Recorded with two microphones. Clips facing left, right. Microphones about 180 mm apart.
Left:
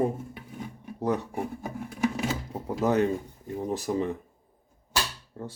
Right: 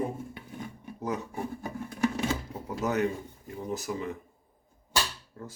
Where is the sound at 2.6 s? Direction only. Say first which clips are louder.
Left 4 dB; 30° left (ahead or behind).